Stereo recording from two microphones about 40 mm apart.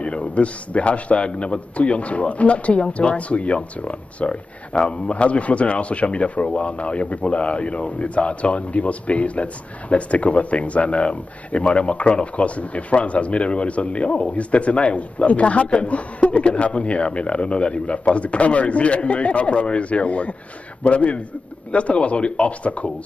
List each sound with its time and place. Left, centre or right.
0.0 s a man's voice: left